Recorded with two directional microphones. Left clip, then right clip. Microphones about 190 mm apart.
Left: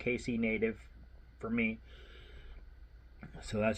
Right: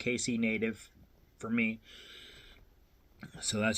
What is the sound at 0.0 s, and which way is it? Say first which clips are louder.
Speech: right 2 dB; 15° right (ahead or behind).